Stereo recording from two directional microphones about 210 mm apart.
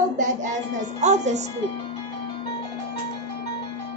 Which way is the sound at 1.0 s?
35° right (ahead or behind).